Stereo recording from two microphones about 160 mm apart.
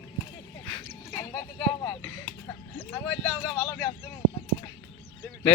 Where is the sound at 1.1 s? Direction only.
20° left (ahead or behind).